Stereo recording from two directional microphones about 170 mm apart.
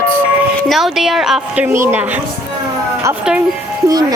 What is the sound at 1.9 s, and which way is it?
Speech, 10° right (ahead or behind).